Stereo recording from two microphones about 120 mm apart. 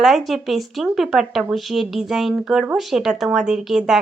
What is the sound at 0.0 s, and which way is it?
Speech, centre (ahead or behind).